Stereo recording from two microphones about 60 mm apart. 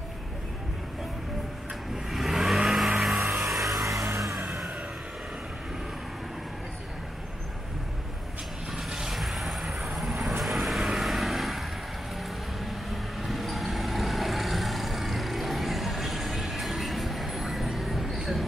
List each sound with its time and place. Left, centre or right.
2.0 s vehicle: centre
3.0 s music: centre
3.7 s vehicle: right
4.4 s vehicle: right
8.7 s vehicle: centre